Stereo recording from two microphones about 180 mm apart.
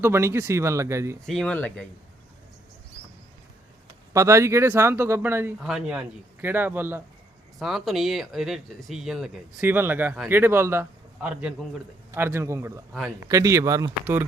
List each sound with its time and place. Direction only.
0.0 s speech: 15° right (ahead or behind)
1.2 s speech: 5° left (ahead or behind)
4.1 s speech: 15° right (ahead or behind)
7.6 s speech: centre (ahead or behind)